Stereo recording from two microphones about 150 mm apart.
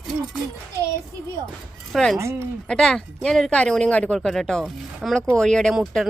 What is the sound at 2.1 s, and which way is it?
Speech, 20° right (ahead or behind).